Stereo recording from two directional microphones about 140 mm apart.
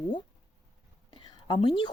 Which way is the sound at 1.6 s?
35° left (ahead or behind).